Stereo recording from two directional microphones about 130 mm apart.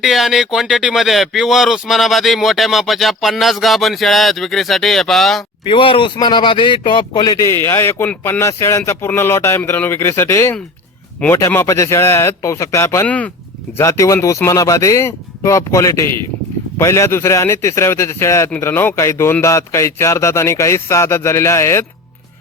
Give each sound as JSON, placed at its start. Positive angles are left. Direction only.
{"t": 0.0, "sound": "speech", "side_deg": 0}
{"t": 5.6, "sound": "a man's voice", "side_deg": 40}